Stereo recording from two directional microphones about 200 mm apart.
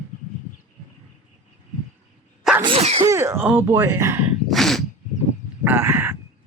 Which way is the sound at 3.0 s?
15° right (ahead or behind).